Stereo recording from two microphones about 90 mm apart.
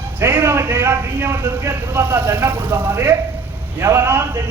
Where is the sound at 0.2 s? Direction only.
25° right (ahead or behind).